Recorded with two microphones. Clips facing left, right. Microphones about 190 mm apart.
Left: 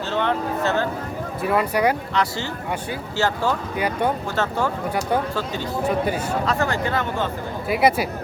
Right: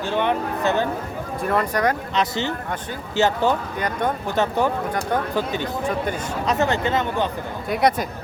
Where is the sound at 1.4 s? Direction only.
5° left (ahead or behind).